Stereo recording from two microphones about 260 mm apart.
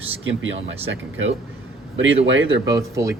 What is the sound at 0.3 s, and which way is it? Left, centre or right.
Speech, right.